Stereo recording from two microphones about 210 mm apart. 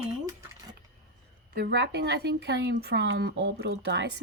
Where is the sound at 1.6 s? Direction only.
50° right (ahead or behind).